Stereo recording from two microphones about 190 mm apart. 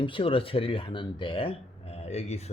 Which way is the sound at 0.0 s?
25° left (ahead or behind).